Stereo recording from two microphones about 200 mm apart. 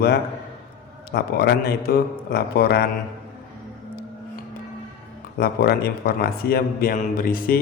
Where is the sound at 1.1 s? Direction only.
55° left (ahead or behind).